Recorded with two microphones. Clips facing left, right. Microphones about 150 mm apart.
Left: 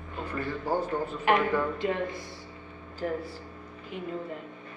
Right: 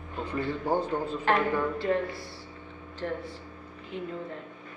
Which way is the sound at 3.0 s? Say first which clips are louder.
Left 2 dB; 5° left (ahead or behind).